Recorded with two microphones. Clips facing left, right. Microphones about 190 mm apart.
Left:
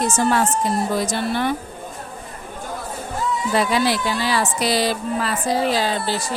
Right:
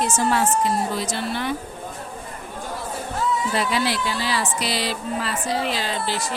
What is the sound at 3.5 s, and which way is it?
A woman's voice, 45° left (ahead or behind).